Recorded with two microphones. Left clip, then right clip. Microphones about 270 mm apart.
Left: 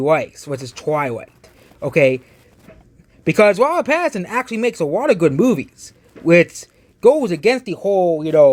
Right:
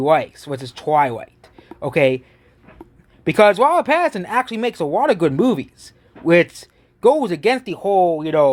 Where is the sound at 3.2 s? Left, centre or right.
Centre.